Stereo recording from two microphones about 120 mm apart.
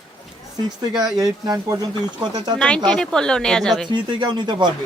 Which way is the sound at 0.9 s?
5° right (ahead or behind).